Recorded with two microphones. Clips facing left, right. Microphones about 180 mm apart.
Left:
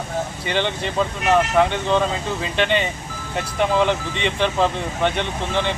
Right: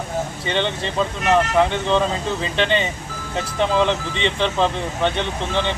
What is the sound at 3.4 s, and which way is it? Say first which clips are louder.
Speech: even; 5° left (ahead or behind).